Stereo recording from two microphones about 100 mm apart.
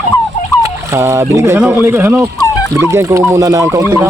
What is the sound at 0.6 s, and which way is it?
Fowl, 30° right (ahead or behind).